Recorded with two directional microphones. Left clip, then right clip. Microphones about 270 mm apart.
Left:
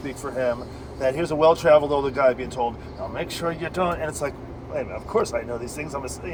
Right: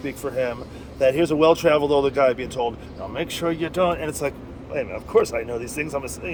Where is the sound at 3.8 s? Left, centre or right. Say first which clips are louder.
Right 3 dB; right.